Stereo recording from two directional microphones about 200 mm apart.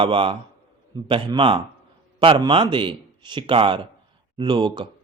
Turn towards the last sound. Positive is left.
turn(degrees=-25)  # may be behind; listen again after turning